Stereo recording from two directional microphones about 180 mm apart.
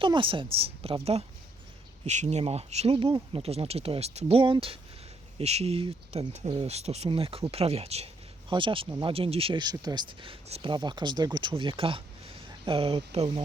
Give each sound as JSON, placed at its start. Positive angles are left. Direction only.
{"t": 0.0, "sound": "speech", "side_deg": -30}
{"t": 2.0, "sound": "speech", "side_deg": -40}